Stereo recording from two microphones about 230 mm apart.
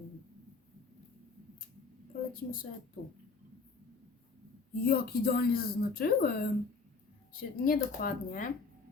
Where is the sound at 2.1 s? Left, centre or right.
Left.